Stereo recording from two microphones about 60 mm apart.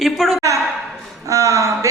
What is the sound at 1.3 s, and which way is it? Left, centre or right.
Speech, right.